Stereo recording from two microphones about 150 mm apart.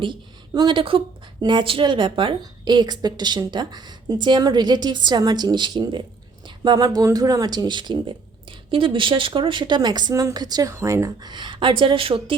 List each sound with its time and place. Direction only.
0.0 s speech: 30° right (ahead or behind)